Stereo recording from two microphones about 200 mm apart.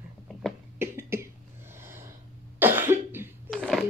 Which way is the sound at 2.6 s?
10° right (ahead or behind).